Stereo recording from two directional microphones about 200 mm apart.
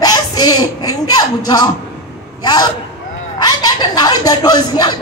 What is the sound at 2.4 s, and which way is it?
A woman's voice, 20° left (ahead or behind).